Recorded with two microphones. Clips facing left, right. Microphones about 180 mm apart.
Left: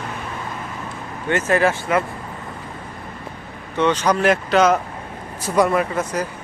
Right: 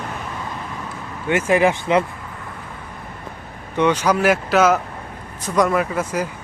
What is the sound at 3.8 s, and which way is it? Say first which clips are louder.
Speech: right 1 dB; 10° right (ahead or behind).